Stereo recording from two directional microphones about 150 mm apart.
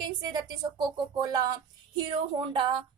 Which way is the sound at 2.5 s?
35° right (ahead or behind).